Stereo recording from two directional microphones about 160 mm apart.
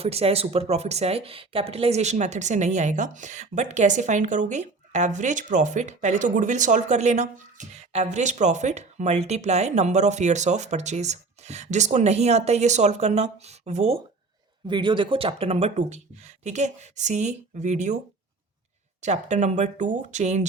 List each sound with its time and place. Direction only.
0.0 s speech: 40° right (ahead or behind)
14.7 s speech: 30° right (ahead or behind); by 17.9 s 50° right (ahead or behind)
19.0 s speech: 45° right (ahead or behind)